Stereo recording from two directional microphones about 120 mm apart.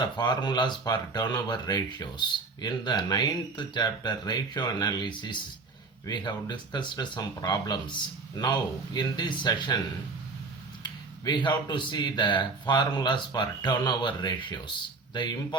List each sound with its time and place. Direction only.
0.0 s speech: 35° left (ahead or behind)
10.8 s speech: 40° left (ahead or behind)